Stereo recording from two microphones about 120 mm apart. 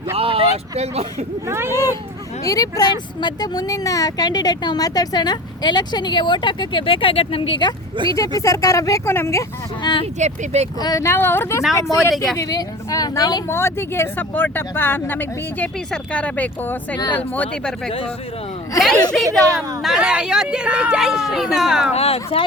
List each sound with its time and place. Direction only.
0.2 s speech: 50° right (ahead or behind)
1.5 s speech: 20° right (ahead or behind)
2.4 s speech: 30° left (ahead or behind); by 7.7 s 45° left (ahead or behind)
8.0 s speech: 40° right (ahead or behind)
8.4 s speech: 30° left (ahead or behind)
9.8 s speech: 40° left (ahead or behind)
10.2 s speech: 65° right (ahead or behind)
10.8 s speech: 30° left (ahead or behind)
12.1 s speech: centre (ahead or behind)
12.4 s speech: 30° left (ahead or behind)
13.5 s speech: 20° left (ahead or behind)
19.1 s speech: centre (ahead or behind)
21.9 s speech: 55° left (ahead or behind)